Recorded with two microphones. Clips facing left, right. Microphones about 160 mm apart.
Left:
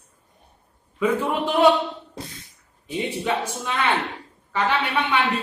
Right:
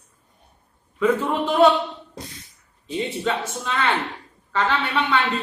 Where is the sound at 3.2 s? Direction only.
15° left (ahead or behind).